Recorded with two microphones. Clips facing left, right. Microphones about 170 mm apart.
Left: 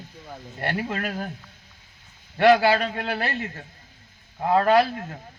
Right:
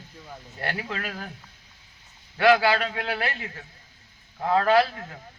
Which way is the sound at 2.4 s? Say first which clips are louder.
Left 2 dB; 40° left (ahead or behind).